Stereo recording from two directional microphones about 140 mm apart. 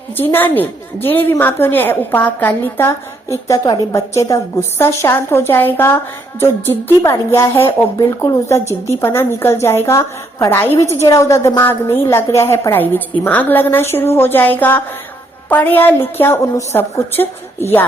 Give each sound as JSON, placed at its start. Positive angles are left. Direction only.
{"t": 0.2, "sound": "a woman's voice", "side_deg": 15}